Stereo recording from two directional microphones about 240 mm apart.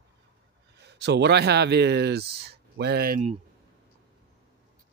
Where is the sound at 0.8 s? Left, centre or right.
Right.